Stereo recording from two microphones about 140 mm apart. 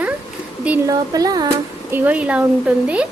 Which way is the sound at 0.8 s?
25° right (ahead or behind).